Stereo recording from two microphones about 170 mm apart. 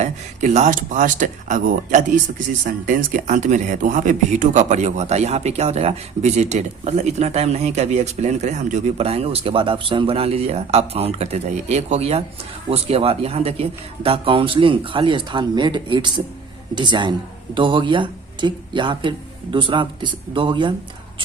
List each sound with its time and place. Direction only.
0.0 s a man's voice: 45° right (ahead or behind); by 21.3 s 30° right (ahead or behind)